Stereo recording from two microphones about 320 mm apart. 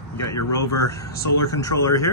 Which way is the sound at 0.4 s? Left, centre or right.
Left.